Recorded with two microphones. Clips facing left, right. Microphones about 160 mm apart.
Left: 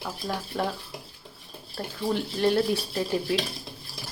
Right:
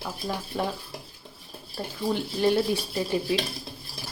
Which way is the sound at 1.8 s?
Centre (ahead or behind).